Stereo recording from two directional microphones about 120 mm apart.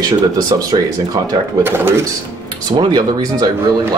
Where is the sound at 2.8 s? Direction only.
35° right (ahead or behind).